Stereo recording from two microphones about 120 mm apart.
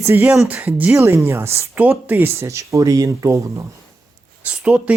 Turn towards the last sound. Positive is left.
turn(degrees=-10)  # may be behind; listen again after turning